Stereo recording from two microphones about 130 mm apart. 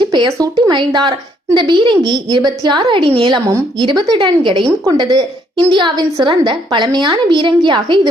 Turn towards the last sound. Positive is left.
turn(degrees=-40)  # may be behind; listen again after turning